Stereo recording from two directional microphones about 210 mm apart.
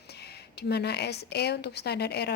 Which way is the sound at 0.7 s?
50° left (ahead or behind).